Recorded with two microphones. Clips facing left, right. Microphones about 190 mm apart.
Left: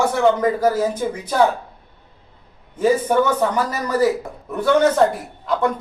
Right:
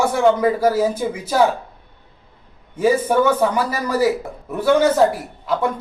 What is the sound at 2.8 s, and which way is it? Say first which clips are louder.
Speech: right 1 dB; 10° right (ahead or behind).